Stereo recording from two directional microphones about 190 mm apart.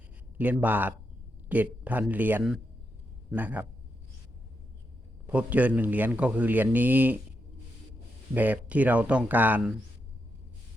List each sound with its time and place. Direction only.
0.3 s a man's voice: 10° right (ahead or behind)
5.2 s a man's voice: 5° right (ahead or behind)
8.3 s a man's voice: 10° right (ahead or behind)